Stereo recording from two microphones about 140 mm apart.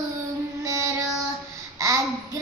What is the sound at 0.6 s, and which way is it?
Child singing, 20° right (ahead or behind).